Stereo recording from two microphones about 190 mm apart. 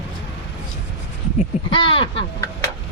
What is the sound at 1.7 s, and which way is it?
Speech, 25° left (ahead or behind).